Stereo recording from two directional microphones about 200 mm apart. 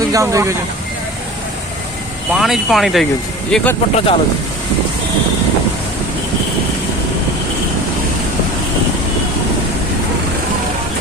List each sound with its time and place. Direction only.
0.0 s speech: 15° right (ahead or behind)
2.3 s speech: centre (ahead or behind)
3.9 s speech: 30° left (ahead or behind)